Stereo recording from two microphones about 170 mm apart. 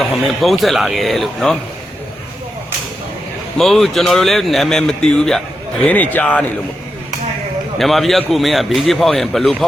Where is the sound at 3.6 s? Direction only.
Centre (ahead or behind).